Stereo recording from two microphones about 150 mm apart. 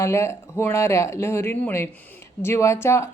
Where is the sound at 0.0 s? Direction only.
20° left (ahead or behind).